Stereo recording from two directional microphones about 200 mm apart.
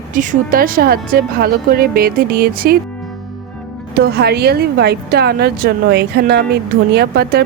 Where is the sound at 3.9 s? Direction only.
55° right (ahead or behind).